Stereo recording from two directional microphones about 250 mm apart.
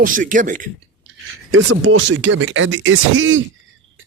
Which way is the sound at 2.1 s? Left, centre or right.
Right.